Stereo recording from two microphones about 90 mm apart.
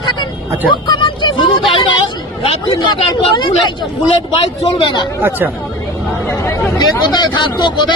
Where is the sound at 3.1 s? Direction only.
55° left (ahead or behind).